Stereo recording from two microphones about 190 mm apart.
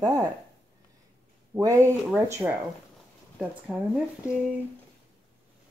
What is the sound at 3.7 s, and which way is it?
Speech, 5° right (ahead or behind).